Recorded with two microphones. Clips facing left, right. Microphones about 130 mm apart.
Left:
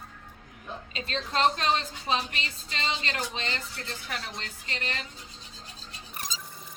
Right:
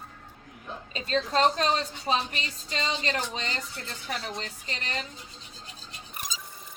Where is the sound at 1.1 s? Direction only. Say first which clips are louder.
Right 3 dB; 35° right (ahead or behind).